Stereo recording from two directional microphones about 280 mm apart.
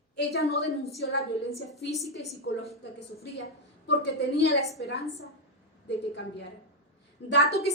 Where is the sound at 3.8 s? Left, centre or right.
Left.